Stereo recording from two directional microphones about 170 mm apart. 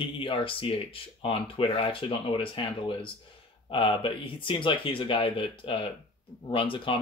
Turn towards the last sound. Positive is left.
turn(degrees=30)  # may be behind; listen again after turning